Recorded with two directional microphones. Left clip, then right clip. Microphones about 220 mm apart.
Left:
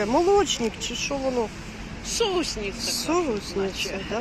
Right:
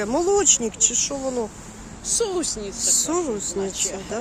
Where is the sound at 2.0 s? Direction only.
65° right (ahead or behind).